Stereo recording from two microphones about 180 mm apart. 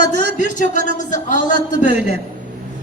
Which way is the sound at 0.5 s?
45° left (ahead or behind).